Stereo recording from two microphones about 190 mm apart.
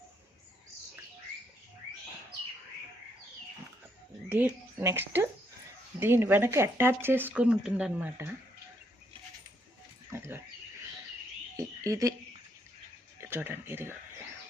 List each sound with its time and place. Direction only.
4.3 s speech: 10° right (ahead or behind)
10.1 s dog: 15° right (ahead or behind)
11.5 s a sound: 15° right (ahead or behind)
13.1 s speech: 10° right (ahead or behind)